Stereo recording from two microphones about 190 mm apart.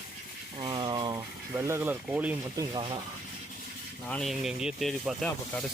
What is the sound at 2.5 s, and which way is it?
Speech, 20° right (ahead or behind).